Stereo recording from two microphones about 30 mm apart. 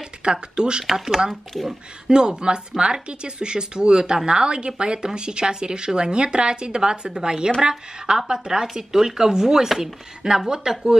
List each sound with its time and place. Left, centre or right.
0.2 s speech: right
0.8 s speech: centre
1.3 s speech: centre
2.0 s speech: right